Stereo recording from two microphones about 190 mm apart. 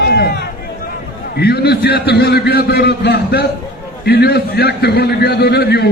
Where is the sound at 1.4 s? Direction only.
60° left (ahead or behind).